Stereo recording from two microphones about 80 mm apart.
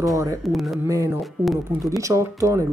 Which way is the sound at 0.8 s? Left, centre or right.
Right.